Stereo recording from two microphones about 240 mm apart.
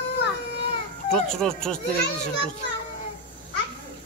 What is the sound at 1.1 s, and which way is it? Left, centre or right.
Speech, centre.